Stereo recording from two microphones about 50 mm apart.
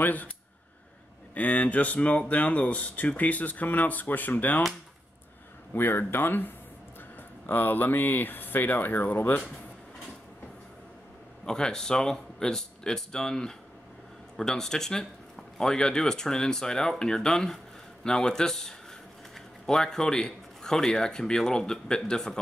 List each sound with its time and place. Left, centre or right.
0.0 s speech: left
1.3 s speech: left
5.8 s speech: left
11.4 s a man's voice: centre